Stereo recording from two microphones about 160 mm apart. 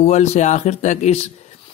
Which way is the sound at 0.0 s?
45° left (ahead or behind).